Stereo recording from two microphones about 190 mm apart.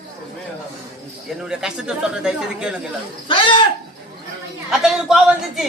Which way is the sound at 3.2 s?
25° left (ahead or behind).